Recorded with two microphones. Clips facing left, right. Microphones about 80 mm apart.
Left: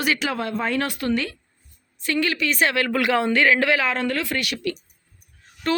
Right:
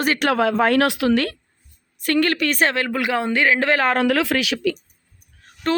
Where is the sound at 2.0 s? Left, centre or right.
Right.